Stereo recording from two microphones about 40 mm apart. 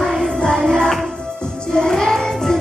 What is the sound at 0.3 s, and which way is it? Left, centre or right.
Music, left.